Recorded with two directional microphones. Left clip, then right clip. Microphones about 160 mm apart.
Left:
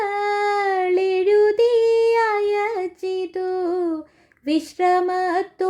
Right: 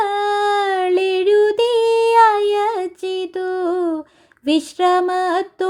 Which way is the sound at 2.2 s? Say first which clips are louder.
Right 6 dB; 35° right (ahead or behind).